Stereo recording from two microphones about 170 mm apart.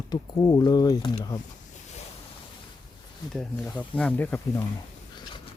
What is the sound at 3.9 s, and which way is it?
Speech, 10° left (ahead or behind).